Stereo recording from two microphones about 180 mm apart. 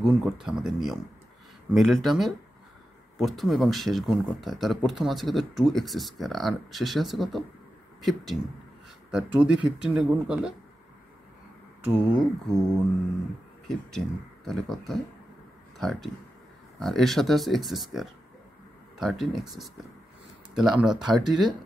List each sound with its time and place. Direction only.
0.0 s speech: centre (ahead or behind)
12.2 s speech: centre (ahead or behind)
13.7 s speech: centre (ahead or behind)
21.2 s speech: 25° right (ahead or behind)